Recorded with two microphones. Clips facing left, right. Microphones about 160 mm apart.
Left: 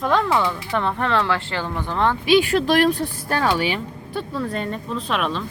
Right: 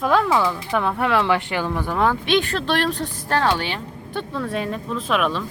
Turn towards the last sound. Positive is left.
turn(degrees=0)  # may be behind; listen again after turning